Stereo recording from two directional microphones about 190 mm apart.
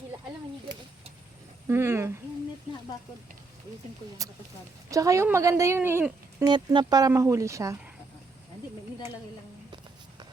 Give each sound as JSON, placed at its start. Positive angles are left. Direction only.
{"t": 1.6, "sound": "speech", "side_deg": -10}
{"t": 4.9, "sound": "speech", "side_deg": -15}
{"t": 6.5, "sound": "speech", "side_deg": -20}